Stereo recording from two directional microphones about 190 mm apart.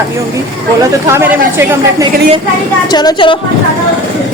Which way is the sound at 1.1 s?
15° right (ahead or behind).